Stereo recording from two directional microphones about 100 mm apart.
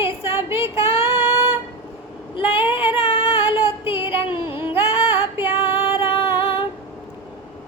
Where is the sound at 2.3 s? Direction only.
70° left (ahead or behind); by 3.6 s 85° left.